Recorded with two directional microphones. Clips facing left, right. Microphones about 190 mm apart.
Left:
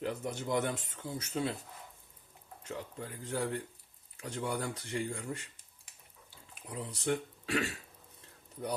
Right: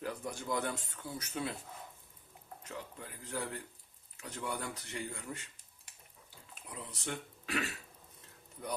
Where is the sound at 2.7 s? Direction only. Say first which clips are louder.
Left 5 dB; 30° left (ahead or behind).